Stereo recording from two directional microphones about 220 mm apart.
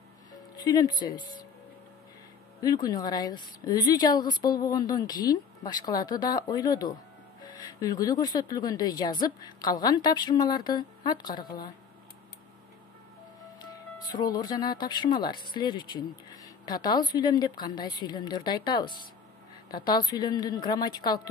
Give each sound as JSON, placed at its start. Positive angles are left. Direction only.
{"t": 0.6, "sound": "speech", "side_deg": 20}
{"t": 2.6, "sound": "a woman's voice", "side_deg": 15}
{"t": 13.7, "sound": "speech", "side_deg": 20}